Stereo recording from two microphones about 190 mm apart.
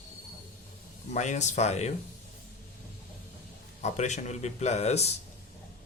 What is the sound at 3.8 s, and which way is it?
A man's voice, 35° left (ahead or behind).